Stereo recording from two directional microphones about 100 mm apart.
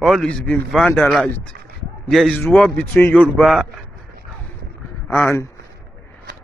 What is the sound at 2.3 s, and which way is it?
Speech, 10° left (ahead or behind).